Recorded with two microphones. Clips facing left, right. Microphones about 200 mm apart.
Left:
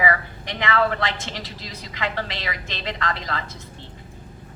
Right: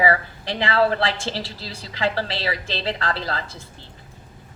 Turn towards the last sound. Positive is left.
turn(degrees=-30)  # may be behind; listen again after turning